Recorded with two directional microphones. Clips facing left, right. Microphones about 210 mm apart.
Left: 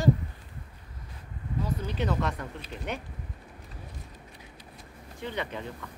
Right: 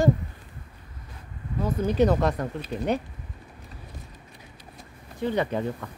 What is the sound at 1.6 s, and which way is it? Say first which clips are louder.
Speech: right 9 dB; 50° right (ahead or behind).